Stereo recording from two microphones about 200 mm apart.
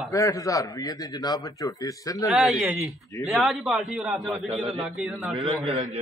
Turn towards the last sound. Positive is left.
turn(degrees=-30)  # may be behind; listen again after turning